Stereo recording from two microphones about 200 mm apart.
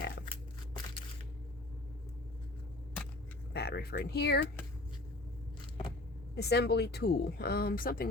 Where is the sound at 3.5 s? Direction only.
55° left (ahead or behind).